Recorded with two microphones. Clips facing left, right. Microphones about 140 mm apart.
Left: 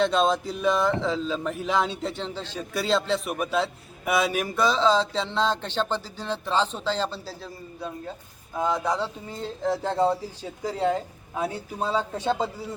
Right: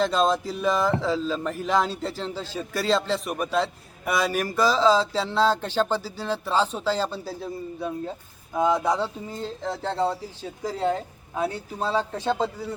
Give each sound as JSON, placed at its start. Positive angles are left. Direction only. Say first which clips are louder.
{"t": 0.0, "sound": "speech", "louder": "even", "side_deg": 0}
{"t": 9.3, "sound": "speech", "louder": "left 3 dB", "side_deg": 0}
{"t": 9.9, "sound": "a man's voice", "louder": "left 2 dB", "side_deg": 15}
{"t": 10.6, "sound": "speech", "louder": "left 1 dB", "side_deg": 0}